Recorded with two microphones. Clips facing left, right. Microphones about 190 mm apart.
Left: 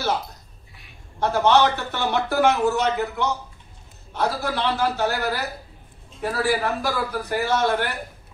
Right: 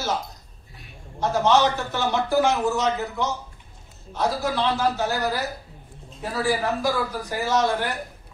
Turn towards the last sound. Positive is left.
turn(degrees=65)  # may be behind; listen again after turning